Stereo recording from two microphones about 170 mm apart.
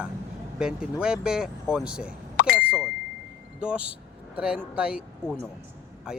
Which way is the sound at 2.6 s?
10° right (ahead or behind).